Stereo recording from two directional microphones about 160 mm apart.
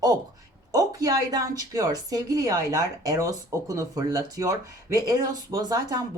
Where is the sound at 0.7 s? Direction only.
20° right (ahead or behind).